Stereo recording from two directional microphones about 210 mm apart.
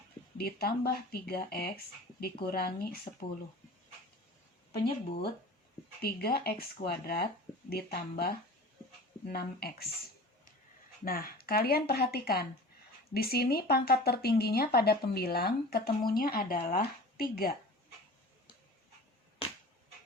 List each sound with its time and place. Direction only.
0.3 s speech: 45° left (ahead or behind)
4.8 s speech: 30° left (ahead or behind)
6.0 s speech: 50° left (ahead or behind)
11.0 s speech: 45° left (ahead or behind)